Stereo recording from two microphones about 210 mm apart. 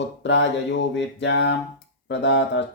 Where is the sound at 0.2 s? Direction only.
60° left (ahead or behind).